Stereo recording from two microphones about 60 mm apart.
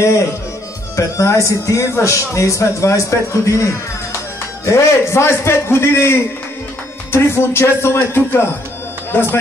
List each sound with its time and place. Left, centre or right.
0.0 s a man's voice: left